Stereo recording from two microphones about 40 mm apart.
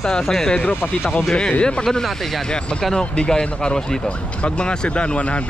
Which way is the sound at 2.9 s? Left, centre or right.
Centre.